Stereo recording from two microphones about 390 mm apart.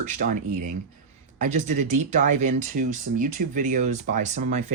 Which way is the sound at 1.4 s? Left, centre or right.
Centre.